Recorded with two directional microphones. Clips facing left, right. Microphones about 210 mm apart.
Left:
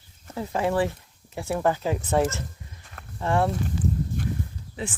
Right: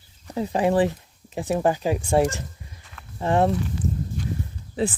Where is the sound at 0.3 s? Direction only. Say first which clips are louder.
Right 4 dB; 15° right (ahead or behind).